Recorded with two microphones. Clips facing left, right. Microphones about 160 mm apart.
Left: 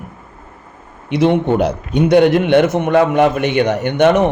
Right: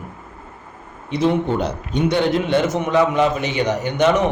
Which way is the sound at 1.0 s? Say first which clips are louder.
Left 5 dB; 70° left (ahead or behind).